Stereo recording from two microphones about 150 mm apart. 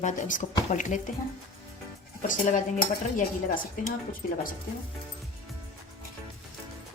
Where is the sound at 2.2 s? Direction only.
60° left (ahead or behind).